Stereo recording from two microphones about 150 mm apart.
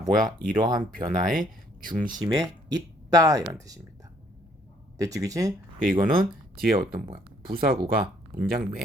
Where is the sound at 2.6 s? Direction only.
25° right (ahead or behind).